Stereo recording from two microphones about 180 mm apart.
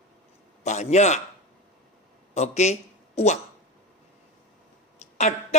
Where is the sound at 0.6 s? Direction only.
40° left (ahead or behind).